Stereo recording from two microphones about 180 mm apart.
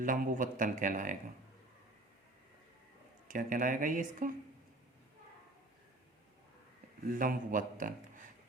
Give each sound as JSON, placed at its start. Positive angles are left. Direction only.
{"t": 0.0, "sound": "speech", "side_deg": -50}
{"t": 3.2, "sound": "speech", "side_deg": -50}
{"t": 7.1, "sound": "speech", "side_deg": -50}